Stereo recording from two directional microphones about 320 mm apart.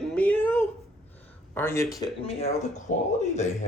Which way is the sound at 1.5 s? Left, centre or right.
Centre.